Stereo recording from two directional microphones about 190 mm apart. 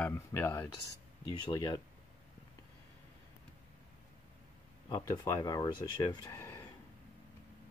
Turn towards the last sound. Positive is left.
turn(degrees=15)  # may be behind; listen again after turning